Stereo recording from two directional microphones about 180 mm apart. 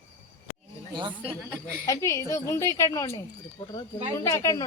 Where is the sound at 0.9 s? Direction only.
25° right (ahead or behind).